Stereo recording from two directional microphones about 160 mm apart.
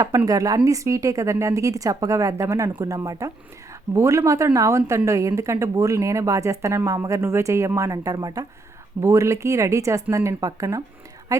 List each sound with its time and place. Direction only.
0.3 s a woman's voice: 20° right (ahead or behind)